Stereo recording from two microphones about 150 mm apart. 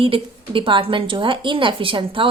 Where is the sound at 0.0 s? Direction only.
35° right (ahead or behind).